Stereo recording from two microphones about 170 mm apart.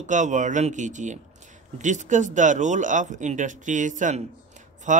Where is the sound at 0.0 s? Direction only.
45° right (ahead or behind).